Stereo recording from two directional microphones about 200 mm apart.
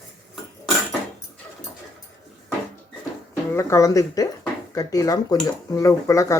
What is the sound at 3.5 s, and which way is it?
Speech, 15° left (ahead or behind).